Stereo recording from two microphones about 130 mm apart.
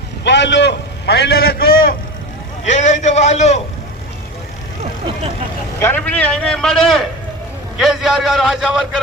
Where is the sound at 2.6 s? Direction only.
65° left (ahead or behind).